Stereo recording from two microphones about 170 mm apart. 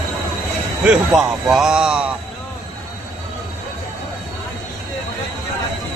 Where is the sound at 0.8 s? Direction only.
5° right (ahead or behind).